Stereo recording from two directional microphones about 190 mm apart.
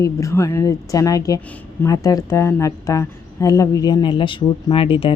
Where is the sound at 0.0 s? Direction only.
15° left (ahead or behind).